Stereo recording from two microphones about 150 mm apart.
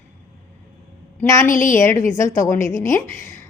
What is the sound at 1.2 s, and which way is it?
Speech, 20° left (ahead or behind).